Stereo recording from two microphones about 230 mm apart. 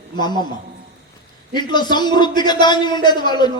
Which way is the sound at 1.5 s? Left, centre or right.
Centre.